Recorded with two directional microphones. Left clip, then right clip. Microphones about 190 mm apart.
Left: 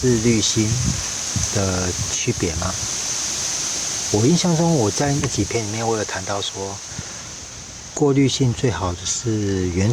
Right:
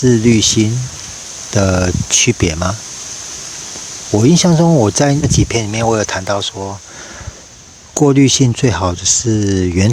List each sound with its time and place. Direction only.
0.3 s speech: 55° right (ahead or behind)
4.2 s speech: 55° right (ahead or behind)
7.9 s speech: 50° right (ahead or behind)